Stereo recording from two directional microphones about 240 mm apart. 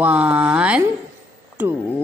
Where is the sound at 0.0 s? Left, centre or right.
Centre.